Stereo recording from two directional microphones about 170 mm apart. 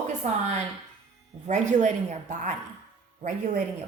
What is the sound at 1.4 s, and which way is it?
A woman's voice, 45° right (ahead or behind).